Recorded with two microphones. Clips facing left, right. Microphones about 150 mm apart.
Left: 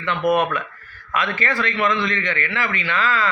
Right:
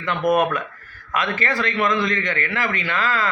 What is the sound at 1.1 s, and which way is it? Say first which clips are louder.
A man's voice: even; 40° right (ahead or behind).